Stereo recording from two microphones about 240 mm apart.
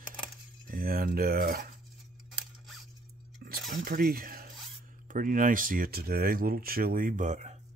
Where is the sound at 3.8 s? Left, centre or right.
Right.